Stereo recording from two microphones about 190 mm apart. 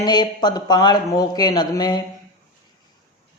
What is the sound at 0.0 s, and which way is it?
Speech, 20° left (ahead or behind).